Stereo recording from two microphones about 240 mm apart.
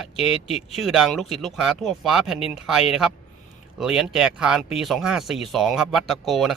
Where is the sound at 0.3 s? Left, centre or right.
Left.